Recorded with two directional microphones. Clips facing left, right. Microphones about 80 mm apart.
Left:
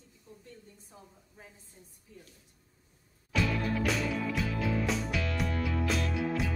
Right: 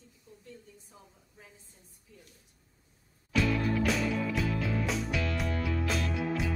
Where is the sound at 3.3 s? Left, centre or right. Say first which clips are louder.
Right 2 dB; centre.